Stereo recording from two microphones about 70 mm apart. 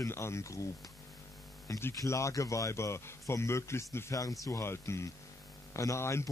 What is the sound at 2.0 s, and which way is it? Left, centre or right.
Speech, left.